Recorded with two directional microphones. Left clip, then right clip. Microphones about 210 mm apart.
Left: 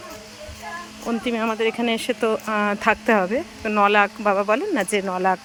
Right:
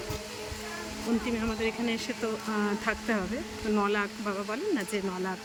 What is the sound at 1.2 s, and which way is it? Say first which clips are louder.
Speech: left 13 dB; 20° left (ahead or behind).